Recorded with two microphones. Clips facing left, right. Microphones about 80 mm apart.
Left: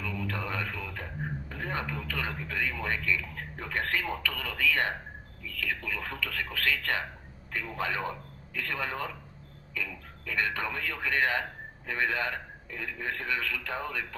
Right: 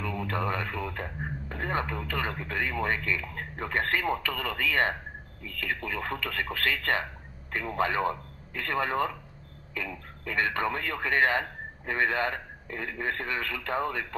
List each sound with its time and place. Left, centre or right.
0.0 s a man's voice: right